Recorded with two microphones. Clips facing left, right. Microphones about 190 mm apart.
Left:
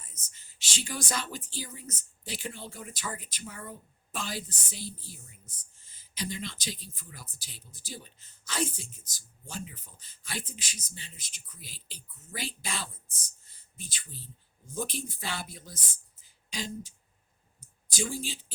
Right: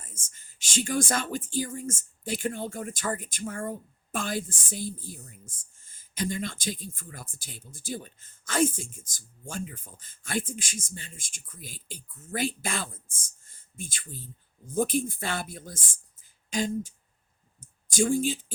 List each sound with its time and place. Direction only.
0.0 s speech: 50° right (ahead or behind)